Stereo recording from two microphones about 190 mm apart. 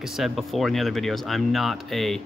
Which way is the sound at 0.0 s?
Centre (ahead or behind).